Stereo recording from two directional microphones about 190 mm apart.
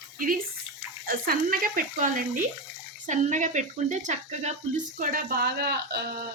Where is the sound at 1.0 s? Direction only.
50° right (ahead or behind).